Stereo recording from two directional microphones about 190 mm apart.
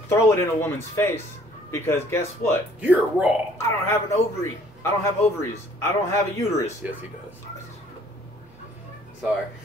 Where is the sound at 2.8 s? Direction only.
5° right (ahead or behind).